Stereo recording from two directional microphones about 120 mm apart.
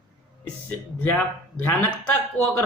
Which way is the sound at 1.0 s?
15° left (ahead or behind).